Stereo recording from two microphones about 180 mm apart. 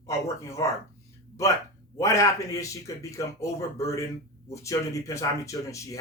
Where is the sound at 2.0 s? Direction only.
15° left (ahead or behind).